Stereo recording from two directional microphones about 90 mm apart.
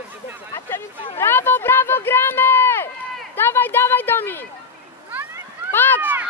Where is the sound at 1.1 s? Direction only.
25° left (ahead or behind).